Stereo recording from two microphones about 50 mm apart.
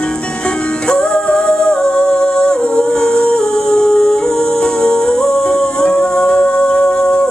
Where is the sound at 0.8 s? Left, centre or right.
Centre.